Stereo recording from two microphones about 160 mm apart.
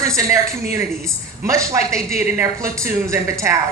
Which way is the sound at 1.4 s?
20° right (ahead or behind).